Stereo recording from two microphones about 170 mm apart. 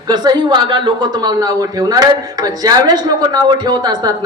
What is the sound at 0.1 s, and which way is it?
A woman's voice, 25° right (ahead or behind).